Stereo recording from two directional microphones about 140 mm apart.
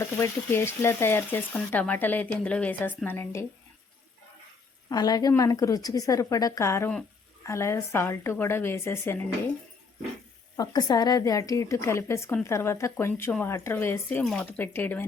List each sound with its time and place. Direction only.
0.0 s speech: 20° left (ahead or behind)
4.9 s a woman's voice: 30° left (ahead or behind)
10.6 s a woman's voice: 30° left (ahead or behind)